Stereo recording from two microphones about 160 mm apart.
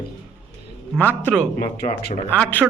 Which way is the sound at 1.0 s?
10° left (ahead or behind).